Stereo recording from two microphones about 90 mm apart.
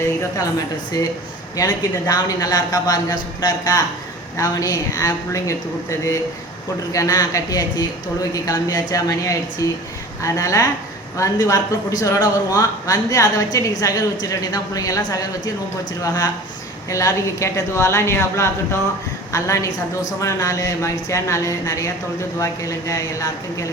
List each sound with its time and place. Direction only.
0.0 s speech: 35° left (ahead or behind)
0.9 s a woman's voice: 45° left (ahead or behind)